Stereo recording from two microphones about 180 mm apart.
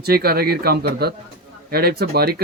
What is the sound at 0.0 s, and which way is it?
Speech, 60° right (ahead or behind).